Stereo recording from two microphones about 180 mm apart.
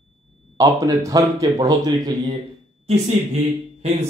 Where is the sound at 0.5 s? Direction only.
20° right (ahead or behind).